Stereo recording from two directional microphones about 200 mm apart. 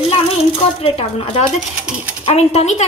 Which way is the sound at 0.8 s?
30° left (ahead or behind).